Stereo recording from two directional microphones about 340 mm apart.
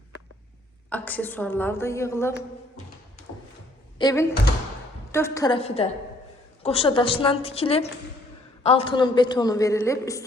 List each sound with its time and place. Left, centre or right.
0.9 s a woman's voice: centre
3.9 s a woman's voice: centre